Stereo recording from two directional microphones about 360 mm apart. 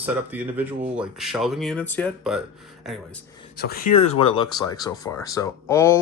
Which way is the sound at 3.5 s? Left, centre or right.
Left.